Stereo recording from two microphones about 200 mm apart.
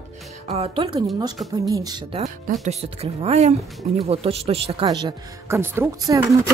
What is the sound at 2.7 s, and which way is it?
A woman's voice, 30° right (ahead or behind).